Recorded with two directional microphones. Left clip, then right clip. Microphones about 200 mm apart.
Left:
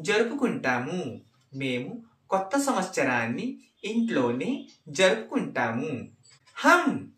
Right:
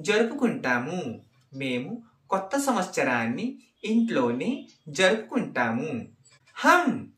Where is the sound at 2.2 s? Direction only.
15° right (ahead or behind).